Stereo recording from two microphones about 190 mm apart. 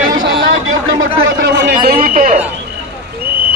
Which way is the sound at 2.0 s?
45° right (ahead or behind).